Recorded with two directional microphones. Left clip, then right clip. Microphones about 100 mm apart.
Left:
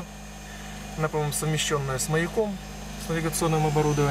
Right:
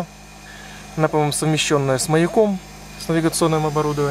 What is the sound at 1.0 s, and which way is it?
Speech, 50° right (ahead or behind).